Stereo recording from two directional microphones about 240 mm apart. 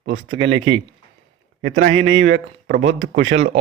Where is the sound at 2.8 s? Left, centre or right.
Right.